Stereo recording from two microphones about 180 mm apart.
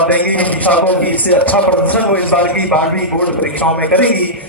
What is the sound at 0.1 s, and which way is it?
A man's voice, 10° left (ahead or behind).